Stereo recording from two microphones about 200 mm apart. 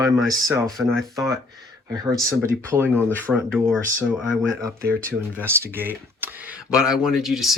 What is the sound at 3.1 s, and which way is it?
Speech, 5° left (ahead or behind).